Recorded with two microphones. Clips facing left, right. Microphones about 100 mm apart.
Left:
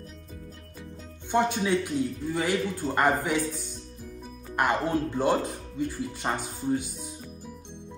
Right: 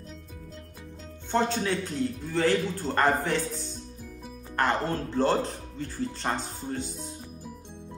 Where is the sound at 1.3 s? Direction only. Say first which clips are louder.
Left 2 dB; 15° left (ahead or behind).